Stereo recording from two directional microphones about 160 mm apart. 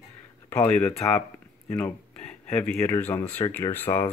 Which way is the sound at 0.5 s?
10° left (ahead or behind).